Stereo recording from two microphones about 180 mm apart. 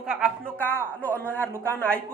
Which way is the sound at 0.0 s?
5° right (ahead or behind).